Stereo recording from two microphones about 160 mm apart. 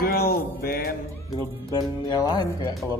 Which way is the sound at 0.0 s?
70° left (ahead or behind).